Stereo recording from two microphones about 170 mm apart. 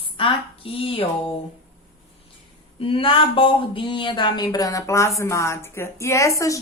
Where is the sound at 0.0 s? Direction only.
30° left (ahead or behind).